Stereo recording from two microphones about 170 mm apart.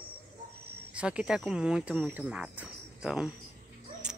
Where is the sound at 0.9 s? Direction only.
5° right (ahead or behind).